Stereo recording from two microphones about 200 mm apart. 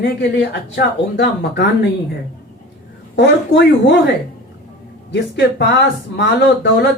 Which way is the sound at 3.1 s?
65° left (ahead or behind).